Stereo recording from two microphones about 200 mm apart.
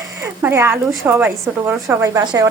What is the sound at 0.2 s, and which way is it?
A woman's voice, 15° right (ahead or behind).